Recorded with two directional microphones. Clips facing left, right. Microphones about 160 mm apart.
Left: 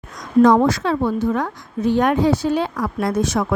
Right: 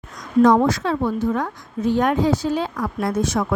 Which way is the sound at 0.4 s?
80° left.